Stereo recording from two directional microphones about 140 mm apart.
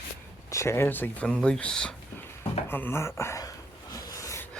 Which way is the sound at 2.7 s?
15° left (ahead or behind).